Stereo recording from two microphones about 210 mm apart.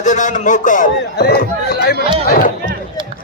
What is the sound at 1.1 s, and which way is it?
Speech, 50° left (ahead or behind).